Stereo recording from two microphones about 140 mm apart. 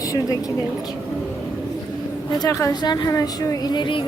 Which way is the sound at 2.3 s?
25° left (ahead or behind).